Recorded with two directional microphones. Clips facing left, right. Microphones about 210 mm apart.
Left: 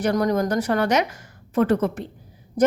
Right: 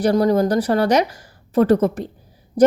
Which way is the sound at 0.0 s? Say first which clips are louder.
Right 5 dB; 30° right (ahead or behind).